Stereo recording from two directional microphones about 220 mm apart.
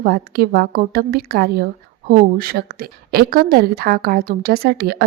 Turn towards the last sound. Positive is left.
turn(degrees=-45)  # may be behind; listen again after turning